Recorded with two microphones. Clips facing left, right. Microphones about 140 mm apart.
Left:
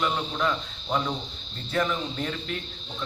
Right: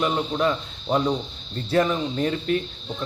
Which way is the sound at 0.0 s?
25° right (ahead or behind).